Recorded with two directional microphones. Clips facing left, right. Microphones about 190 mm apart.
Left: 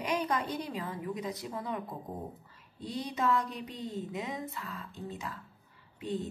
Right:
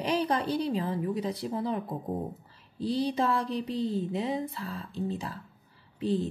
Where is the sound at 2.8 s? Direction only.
30° right (ahead or behind).